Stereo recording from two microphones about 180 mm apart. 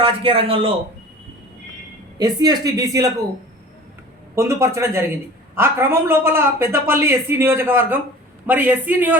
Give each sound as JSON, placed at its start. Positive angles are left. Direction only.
{"t": 0.0, "sound": "a man's voice", "side_deg": -30}
{"t": 2.1, "sound": "speech", "side_deg": -20}
{"t": 4.4, "sound": "speech", "side_deg": -15}